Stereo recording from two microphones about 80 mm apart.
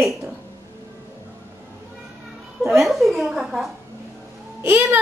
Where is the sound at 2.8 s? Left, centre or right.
Centre.